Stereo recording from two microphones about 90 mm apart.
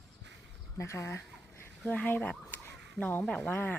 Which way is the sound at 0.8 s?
30° left (ahead or behind).